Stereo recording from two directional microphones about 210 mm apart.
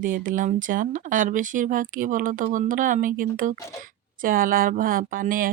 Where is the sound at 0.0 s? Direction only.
40° right (ahead or behind).